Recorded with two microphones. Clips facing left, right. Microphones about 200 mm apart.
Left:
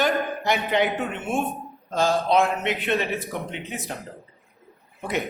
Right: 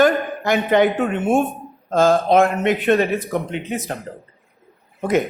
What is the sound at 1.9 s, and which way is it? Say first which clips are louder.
Speech: right 6 dB; 50° right (ahead or behind).